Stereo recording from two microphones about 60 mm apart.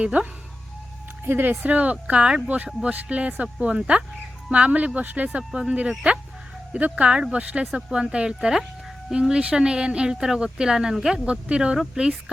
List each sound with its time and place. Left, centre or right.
0.0 s speech: right
1.2 s speech: right; by 11.2 s centre
11.3 s speech: centre